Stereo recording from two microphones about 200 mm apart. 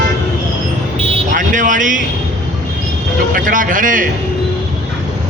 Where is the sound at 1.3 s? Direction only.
40° right (ahead or behind).